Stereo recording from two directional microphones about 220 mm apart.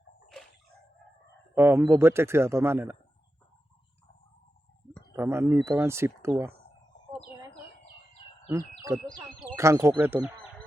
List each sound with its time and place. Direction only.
1.5 s a man's voice: 10° right (ahead or behind)
5.1 s a man's voice: 10° right (ahead or behind)
8.8 s a man's voice: 15° right (ahead or behind)